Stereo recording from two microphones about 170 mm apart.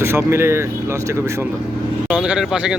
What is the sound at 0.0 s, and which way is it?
Speech, 15° right (ahead or behind).